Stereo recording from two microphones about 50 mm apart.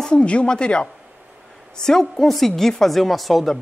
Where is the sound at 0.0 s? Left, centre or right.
Left; by 3.5 s centre.